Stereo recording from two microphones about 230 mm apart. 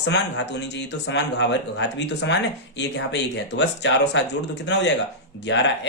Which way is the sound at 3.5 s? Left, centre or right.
Left.